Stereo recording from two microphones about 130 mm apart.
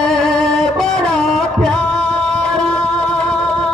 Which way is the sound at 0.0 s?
5° left (ahead or behind).